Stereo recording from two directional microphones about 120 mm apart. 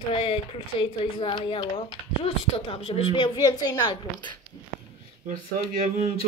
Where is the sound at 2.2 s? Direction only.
55° left (ahead or behind).